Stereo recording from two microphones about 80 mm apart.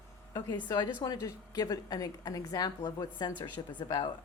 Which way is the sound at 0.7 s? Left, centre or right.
Left.